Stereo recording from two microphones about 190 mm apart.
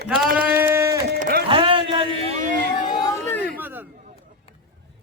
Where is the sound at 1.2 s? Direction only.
50° right (ahead or behind).